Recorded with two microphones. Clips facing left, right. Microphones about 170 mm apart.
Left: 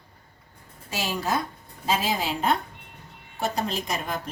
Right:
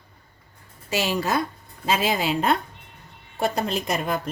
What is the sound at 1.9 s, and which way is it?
A woman's voice, 65° right (ahead or behind).